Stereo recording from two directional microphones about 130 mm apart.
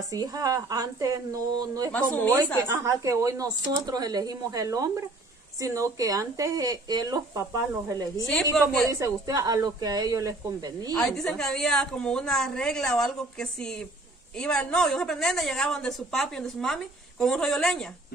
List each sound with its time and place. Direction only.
0.1 s speech: 30° right (ahead or behind)
1.9 s speech: 10° left (ahead or behind)
2.7 s speech: 25° right (ahead or behind)
8.3 s a woman's voice: 5° left (ahead or behind)
9.0 s speech: 25° right (ahead or behind)
11.0 s a woman's voice: centre (ahead or behind)